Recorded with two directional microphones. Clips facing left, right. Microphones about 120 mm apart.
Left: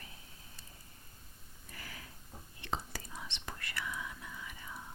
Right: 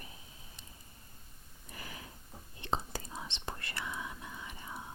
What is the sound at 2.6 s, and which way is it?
Whispering, 25° right (ahead or behind).